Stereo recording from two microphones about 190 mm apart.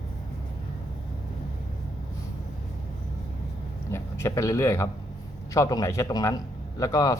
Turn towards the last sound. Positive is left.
turn(degrees=20)  # may be behind; listen again after turning